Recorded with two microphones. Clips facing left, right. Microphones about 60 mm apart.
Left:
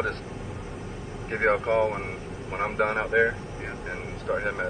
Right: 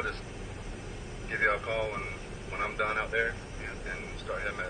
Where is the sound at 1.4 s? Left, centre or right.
Left.